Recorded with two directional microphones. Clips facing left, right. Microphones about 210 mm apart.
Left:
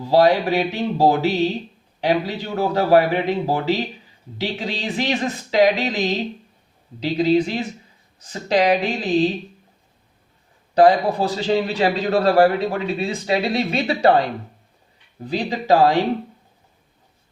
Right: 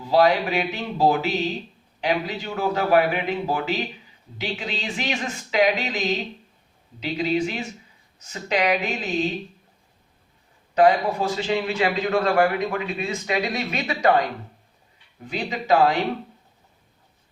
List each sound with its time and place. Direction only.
0.0 s a man's voice: 35° left (ahead or behind)
10.8 s a man's voice: 35° left (ahead or behind)
15.3 s a man's voice: 35° left (ahead or behind)